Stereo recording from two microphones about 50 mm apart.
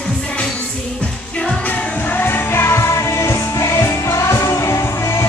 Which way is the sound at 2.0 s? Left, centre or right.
Left.